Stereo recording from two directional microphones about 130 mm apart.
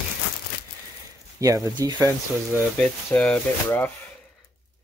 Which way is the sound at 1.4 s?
25° right (ahead or behind).